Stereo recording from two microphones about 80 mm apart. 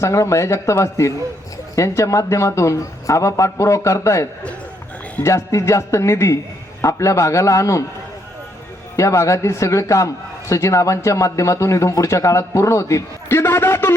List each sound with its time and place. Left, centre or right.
0.0 s speech: left
9.0 s speech: left